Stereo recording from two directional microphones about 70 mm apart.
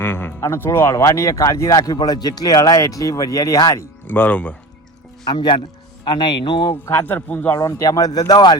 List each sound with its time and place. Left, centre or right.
0.0 s music: left
0.3 s speech: left
1.8 s a man's voice: left
2.6 s speech: left
4.0 s speech: left
5.2 s speech: left
6.9 s a man's voice: left
7.5 s speech: left